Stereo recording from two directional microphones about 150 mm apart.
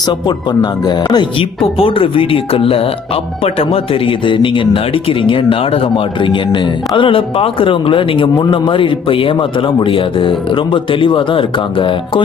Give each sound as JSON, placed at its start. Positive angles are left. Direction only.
{"t": 0.3, "sound": "speech", "side_deg": 30}